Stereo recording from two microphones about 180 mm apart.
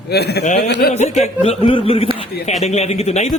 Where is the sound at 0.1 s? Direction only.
65° left (ahead or behind).